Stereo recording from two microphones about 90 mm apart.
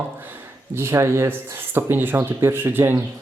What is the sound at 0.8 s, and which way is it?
Speech, 30° right (ahead or behind).